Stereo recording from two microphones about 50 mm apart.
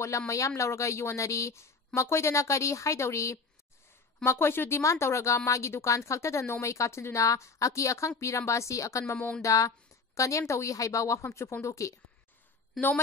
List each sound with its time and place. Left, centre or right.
0.1 s a woman's voice: left
2.0 s speech: left
4.2 s a woman's voice: left